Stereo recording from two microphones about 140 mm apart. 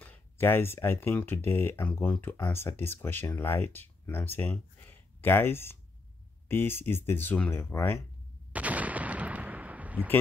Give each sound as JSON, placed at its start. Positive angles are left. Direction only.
{"t": 0.0, "sound": "speech", "side_deg": 15}
{"t": 8.5, "sound": "gunshot", "side_deg": -10}